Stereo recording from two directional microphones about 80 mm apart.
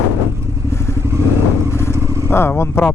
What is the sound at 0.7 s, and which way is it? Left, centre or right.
Motorcycle, left.